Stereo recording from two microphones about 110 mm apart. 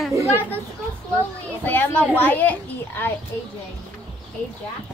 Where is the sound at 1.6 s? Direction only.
20° left (ahead or behind).